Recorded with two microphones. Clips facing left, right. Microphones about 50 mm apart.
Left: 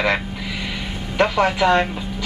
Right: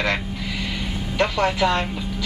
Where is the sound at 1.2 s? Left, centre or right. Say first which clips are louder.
Left 3 dB; left.